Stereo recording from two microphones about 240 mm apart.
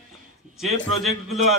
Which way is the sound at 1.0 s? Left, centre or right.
Centre.